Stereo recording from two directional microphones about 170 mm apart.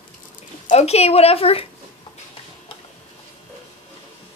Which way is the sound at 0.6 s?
40° left (ahead or behind).